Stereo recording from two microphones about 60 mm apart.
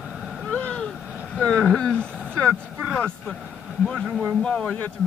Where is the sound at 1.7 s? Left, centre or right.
Centre.